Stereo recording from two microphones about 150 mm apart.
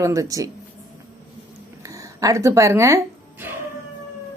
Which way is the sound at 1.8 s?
20° right (ahead or behind).